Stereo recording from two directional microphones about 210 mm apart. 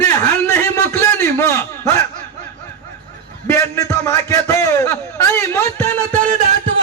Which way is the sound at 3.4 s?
10° left (ahead or behind).